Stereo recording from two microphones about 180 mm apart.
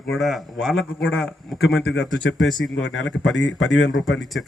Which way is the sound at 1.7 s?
85° left.